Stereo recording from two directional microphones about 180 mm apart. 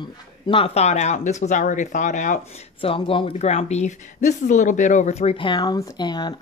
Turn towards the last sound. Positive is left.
turn(degrees=25)  # may be behind; listen again after turning